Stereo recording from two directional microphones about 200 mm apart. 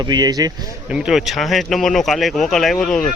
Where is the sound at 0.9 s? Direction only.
Centre (ahead or behind).